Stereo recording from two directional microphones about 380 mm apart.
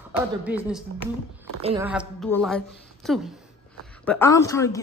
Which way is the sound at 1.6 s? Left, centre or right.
Centre.